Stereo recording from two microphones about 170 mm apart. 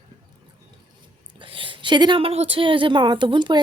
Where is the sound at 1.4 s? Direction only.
30° right (ahead or behind).